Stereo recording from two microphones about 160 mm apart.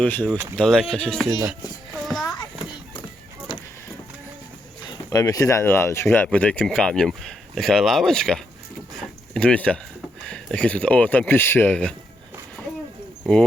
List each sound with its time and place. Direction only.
0.0 s speech: 10° left (ahead or behind)
2.0 s children playing: centre (ahead or behind)
4.8 s speech: 25° left (ahead or behind); by 11.9 s 10° left (ahead or behind)